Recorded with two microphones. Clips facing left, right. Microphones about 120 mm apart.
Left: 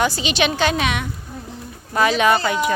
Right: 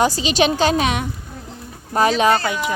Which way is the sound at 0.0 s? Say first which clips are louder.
Right 3 dB; 35° right (ahead or behind).